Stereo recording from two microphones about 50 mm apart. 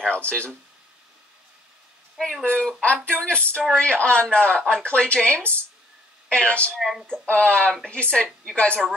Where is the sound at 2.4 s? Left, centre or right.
Left.